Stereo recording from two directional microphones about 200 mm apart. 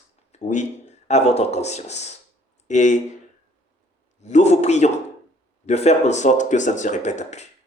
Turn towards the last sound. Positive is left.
turn(degrees=35)  # may be behind; listen again after turning